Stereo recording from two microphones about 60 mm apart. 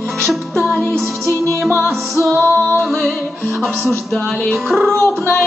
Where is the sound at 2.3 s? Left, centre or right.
Right.